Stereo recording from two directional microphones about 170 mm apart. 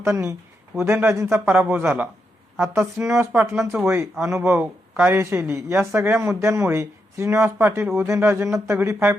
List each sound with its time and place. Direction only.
0.0 s speech: 15° right (ahead or behind)